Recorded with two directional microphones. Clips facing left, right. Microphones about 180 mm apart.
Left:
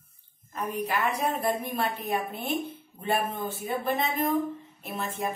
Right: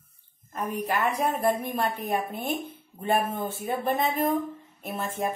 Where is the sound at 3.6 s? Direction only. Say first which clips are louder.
Right 2 dB; 45° right (ahead or behind).